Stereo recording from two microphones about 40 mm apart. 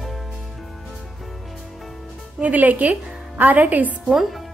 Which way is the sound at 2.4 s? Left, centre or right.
Right.